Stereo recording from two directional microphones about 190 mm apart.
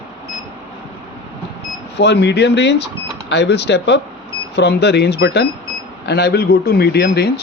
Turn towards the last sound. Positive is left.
turn(degrees=55)  # may be behind; listen again after turning